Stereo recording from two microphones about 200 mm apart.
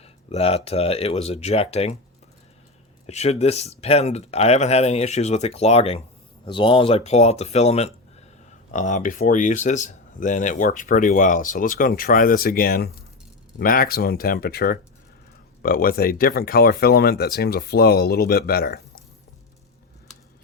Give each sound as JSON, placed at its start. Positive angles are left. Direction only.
{"t": 0.0, "sound": "speech", "side_deg": 30}
{"t": 3.1, "sound": "speech", "side_deg": 35}